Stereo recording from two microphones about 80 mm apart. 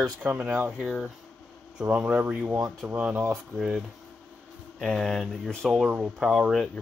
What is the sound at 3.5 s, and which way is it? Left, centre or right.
Speech, centre.